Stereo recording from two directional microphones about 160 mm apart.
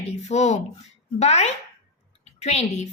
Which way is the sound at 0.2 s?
45° left (ahead or behind).